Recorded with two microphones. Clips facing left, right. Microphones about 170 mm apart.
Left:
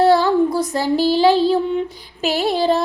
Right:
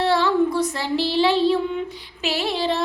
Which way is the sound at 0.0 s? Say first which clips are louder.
Left 5 dB; 40° left (ahead or behind).